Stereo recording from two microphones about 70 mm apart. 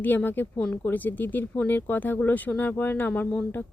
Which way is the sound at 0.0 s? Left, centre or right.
Left.